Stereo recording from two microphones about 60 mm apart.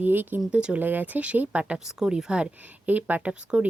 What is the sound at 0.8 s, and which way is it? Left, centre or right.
Speech, right.